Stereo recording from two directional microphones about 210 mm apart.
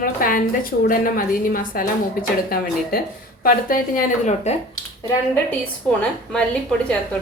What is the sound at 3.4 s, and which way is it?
A woman's voice, 40° left (ahead or behind).